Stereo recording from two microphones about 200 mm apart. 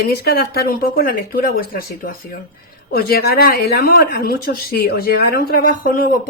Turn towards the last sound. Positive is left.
turn(degrees=45)  # may be behind; listen again after turning